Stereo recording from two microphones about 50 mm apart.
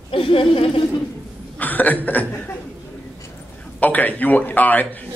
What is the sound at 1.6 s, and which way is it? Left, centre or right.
Speech, left.